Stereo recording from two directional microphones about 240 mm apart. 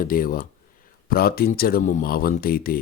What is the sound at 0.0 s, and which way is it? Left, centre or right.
Speech, left.